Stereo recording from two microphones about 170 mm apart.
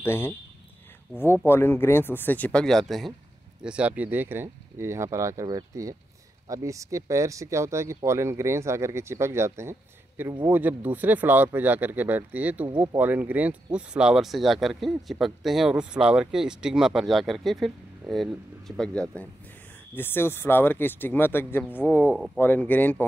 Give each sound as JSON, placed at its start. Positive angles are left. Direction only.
{"t": 0.0, "sound": "speech", "side_deg": 15}
{"t": 22.0, "sound": "speech", "side_deg": -5}
{"t": 22.4, "sound": "speech", "side_deg": 10}